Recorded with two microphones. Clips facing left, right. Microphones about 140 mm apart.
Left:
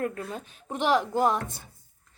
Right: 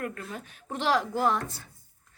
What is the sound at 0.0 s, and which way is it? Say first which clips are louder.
A woman's voice: left 4 dB; 25° left (ahead or behind).